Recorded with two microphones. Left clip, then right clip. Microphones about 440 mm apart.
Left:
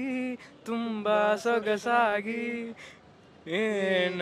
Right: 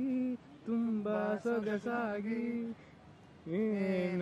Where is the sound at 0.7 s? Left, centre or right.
Centre.